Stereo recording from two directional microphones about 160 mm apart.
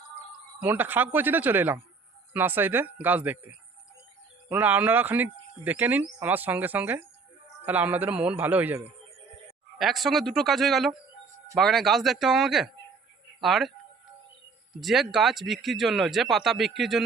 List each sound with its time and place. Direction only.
0.6 s speech: 10° right (ahead or behind)
14.8 s speech: centre (ahead or behind)